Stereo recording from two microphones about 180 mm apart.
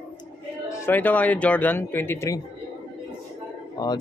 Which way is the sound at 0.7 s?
15° left (ahead or behind).